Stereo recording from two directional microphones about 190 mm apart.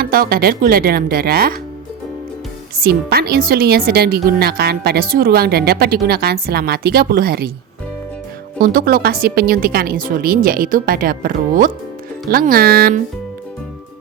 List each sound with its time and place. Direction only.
0.0 s speech: 50° right (ahead or behind)
2.7 s speech: 55° right (ahead or behind)
8.6 s speech: 50° right (ahead or behind)